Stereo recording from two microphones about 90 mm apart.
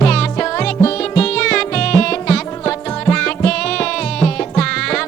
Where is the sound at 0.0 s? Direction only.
10° left (ahead or behind).